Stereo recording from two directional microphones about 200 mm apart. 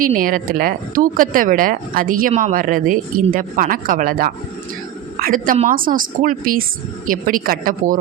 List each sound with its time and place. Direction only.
0.0 s a woman's voice: 45° right (ahead or behind)